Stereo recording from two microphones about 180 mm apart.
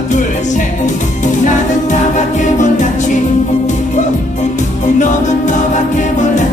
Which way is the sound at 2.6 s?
45° left (ahead or behind).